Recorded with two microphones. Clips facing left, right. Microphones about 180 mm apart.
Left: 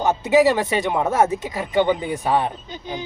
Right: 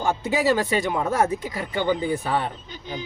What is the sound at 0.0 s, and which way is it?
Speech, 20° left (ahead or behind).